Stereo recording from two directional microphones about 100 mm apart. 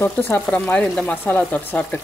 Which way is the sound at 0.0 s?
20° left (ahead or behind).